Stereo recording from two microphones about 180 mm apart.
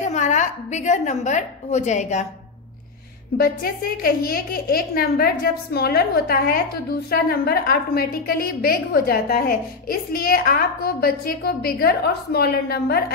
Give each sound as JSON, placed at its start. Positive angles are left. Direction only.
{"t": 0.0, "sound": "a woman's voice", "side_deg": 40}
{"t": 3.3, "sound": "a woman's voice", "side_deg": 55}